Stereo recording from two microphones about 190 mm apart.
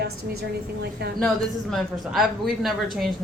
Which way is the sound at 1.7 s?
Centre (ahead or behind).